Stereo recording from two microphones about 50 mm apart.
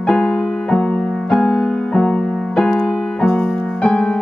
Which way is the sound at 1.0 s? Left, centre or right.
Centre.